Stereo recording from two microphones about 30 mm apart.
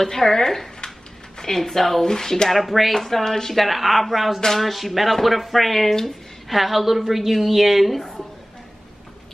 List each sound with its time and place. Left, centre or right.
0.0 s speech: centre
2.5 s a woman's voice: centre
3.5 s a woman's voice: centre